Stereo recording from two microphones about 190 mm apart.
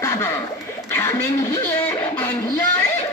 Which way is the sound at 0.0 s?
15° left (ahead or behind).